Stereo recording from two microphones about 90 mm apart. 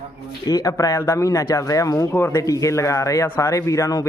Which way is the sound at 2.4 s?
40° left (ahead or behind).